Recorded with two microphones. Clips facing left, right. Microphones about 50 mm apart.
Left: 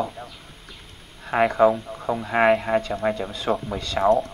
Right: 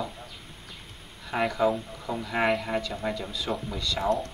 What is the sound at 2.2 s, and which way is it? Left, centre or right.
A man's voice, left.